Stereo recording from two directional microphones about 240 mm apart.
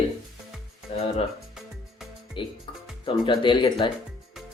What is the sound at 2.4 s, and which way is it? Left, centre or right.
Speech, left.